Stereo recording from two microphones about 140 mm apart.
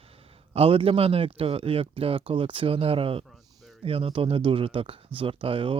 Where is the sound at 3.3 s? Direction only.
Centre (ahead or behind).